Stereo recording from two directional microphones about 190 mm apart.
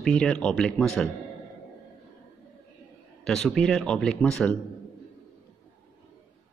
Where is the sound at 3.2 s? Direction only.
5° left (ahead or behind).